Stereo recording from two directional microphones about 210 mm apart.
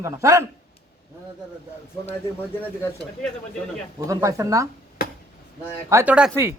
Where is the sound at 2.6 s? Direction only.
10° left (ahead or behind).